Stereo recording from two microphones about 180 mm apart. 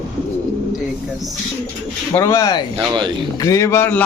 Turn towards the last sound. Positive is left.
turn(degrees=10)  # may be behind; listen again after turning